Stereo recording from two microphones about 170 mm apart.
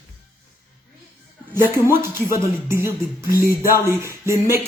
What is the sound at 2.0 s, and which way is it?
Speech, 15° right (ahead or behind).